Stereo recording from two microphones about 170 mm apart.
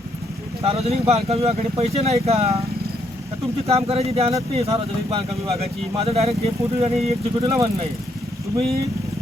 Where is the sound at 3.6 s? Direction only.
35° right (ahead or behind).